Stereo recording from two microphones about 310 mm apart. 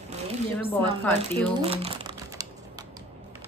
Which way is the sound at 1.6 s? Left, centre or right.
Centre.